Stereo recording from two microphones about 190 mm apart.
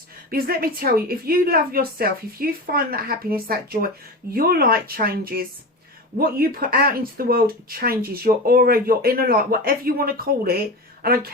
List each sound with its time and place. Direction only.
0.3 s speech: 50° right (ahead or behind)